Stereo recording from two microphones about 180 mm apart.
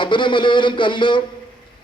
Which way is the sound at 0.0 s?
25° left (ahead or behind).